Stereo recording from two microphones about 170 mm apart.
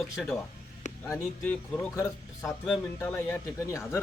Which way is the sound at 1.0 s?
15° left (ahead or behind).